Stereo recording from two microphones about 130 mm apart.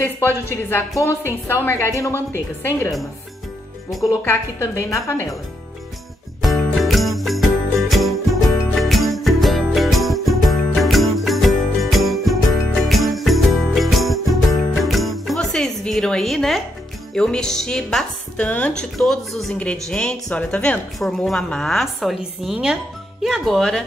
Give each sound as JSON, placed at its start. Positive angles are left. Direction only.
{"t": 0.5, "sound": "a woman's voice", "side_deg": 15}
{"t": 4.2, "sound": "a woman's voice", "side_deg": 20}
{"t": 6.4, "sound": "jingle bell", "side_deg": 0}
{"t": 8.7, "sound": "music", "side_deg": 0}
{"t": 12.8, "sound": "jingle bell", "side_deg": 0}
{"t": 17.1, "sound": "speech", "side_deg": 5}